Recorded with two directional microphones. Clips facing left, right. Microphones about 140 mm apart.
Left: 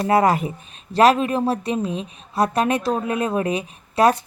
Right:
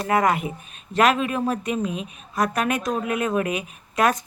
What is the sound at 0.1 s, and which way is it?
A woman's voice, 35° left (ahead or behind).